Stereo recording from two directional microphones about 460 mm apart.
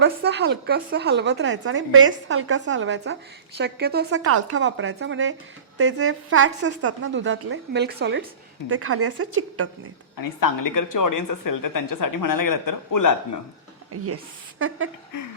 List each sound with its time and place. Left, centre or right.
0.0 s a woman's voice: right
10.2 s speech: left
13.9 s a woman's voice: right